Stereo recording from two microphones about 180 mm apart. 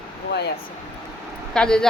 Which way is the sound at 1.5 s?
5° left (ahead or behind).